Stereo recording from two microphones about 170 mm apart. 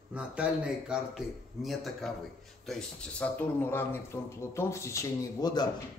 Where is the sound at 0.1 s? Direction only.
5° right (ahead or behind).